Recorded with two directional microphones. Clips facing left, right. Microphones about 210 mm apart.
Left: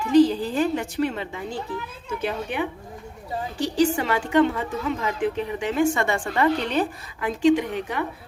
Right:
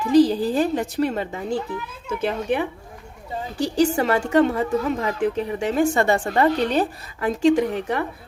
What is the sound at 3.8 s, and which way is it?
A woman's voice, 40° right (ahead or behind).